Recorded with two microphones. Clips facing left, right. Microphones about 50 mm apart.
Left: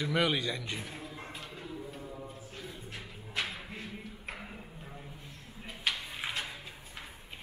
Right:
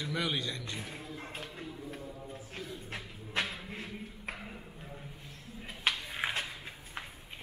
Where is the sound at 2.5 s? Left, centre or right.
Right.